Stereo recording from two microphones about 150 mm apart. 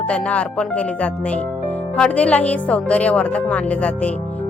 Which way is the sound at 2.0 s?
10° left (ahead or behind).